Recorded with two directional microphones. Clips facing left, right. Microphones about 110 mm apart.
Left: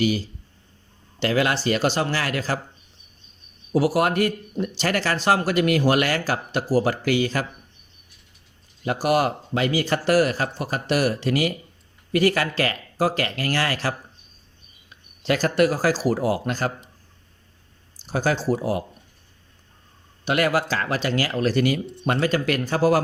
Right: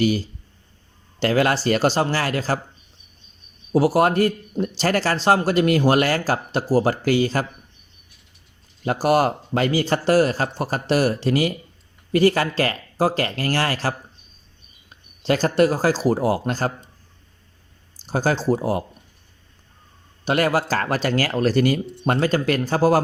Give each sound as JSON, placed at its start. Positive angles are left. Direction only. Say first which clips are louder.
{"t": 0.0, "sound": "speech", "louder": "right 2 dB", "side_deg": -40}
{"t": 3.7, "sound": "speech", "louder": "right 3 dB", "side_deg": -30}
{"t": 8.8, "sound": "speech", "louder": "right 3 dB", "side_deg": -35}
{"t": 15.2, "sound": "speech", "louder": "right 2 dB", "side_deg": -30}
{"t": 18.0, "sound": "speech", "louder": "right 2 dB", "side_deg": -35}
{"t": 20.2, "sound": "speech", "louder": "right 1 dB", "side_deg": -35}